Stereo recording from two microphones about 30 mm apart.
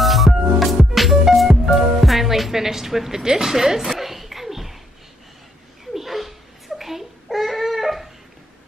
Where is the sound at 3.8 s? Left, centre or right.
Centre.